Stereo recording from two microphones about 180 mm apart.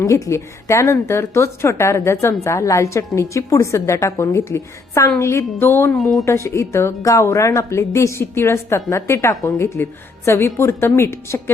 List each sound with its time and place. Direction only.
0.0 s speech: 15° left (ahead or behind)
6.0 s speech: centre (ahead or behind)
6.2 s speech: 15° left (ahead or behind)